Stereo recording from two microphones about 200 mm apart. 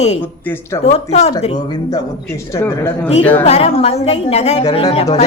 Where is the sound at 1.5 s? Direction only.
20° left (ahead or behind).